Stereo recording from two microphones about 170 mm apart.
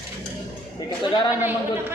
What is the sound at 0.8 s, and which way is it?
Speech, 25° left (ahead or behind).